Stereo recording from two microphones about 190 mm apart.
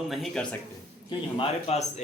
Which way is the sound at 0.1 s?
Centre (ahead or behind).